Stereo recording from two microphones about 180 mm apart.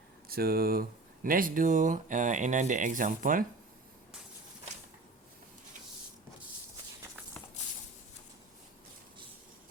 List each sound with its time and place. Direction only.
0.3 s speech: 55° right (ahead or behind)